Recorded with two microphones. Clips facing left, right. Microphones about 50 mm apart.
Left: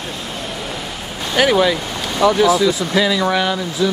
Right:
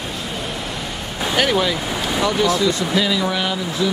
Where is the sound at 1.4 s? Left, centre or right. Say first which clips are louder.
Left 5 dB; centre.